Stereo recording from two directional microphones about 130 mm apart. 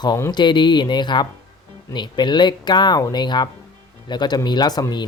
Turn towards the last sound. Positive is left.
turn(degrees=30)  # may be behind; listen again after turning